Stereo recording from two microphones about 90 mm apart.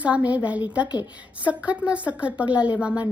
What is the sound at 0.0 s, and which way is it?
A woman's voice, 15° right (ahead or behind).